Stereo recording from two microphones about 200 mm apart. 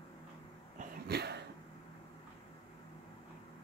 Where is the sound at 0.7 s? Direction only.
55° right (ahead or behind).